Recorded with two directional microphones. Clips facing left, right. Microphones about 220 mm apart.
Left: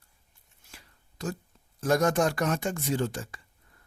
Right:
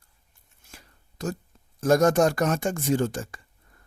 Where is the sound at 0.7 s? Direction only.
45° right (ahead or behind).